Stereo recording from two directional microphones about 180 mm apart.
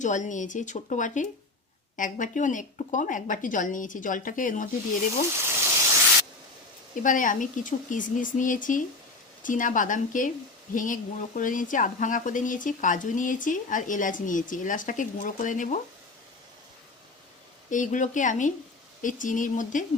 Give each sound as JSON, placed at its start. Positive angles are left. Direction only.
{"t": 0.0, "sound": "speech", "side_deg": 45}
{"t": 5.4, "sound": "sizzle", "side_deg": -15}
{"t": 7.0, "sound": "speech", "side_deg": 45}
{"t": 17.7, "sound": "speech", "side_deg": 45}